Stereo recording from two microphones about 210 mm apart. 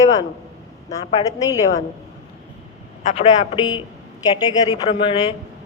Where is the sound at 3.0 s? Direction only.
35° left (ahead or behind).